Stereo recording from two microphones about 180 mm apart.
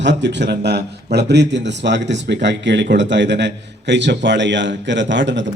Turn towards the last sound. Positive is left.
turn(degrees=-90)